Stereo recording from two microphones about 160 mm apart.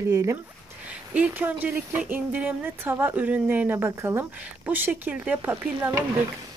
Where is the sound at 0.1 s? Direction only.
20° right (ahead or behind).